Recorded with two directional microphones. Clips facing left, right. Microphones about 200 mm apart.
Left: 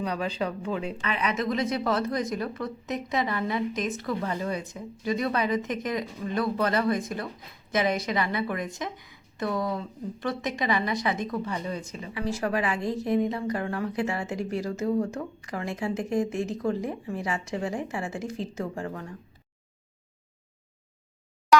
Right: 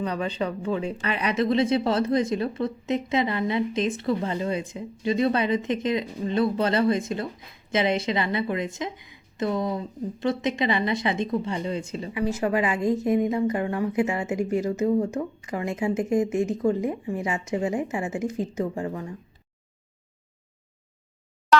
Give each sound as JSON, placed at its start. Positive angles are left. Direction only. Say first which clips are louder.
{"t": 0.0, "sound": "speech", "louder": "right 2 dB", "side_deg": 5}
{"t": 0.9, "sound": "a woman's voice", "louder": "right 3 dB", "side_deg": -35}
{"t": 12.1, "sound": "a woman's voice", "louder": "right 4 dB", "side_deg": -20}